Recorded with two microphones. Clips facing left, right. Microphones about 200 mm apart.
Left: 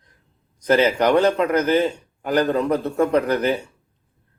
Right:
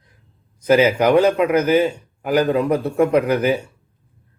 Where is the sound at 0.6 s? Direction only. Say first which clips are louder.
Right 2 dB; 10° right (ahead or behind).